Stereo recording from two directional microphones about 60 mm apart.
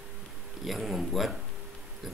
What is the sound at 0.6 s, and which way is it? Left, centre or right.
Speech, centre.